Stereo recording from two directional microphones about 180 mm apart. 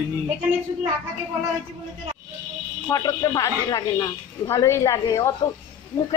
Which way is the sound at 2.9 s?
20° left (ahead or behind).